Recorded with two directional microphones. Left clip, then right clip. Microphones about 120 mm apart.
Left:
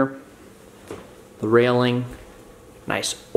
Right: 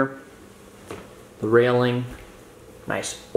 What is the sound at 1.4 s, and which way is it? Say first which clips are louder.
Speech: left 1 dB; 10° left (ahead or behind).